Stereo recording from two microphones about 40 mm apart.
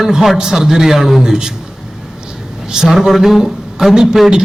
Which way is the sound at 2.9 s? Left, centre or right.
Centre.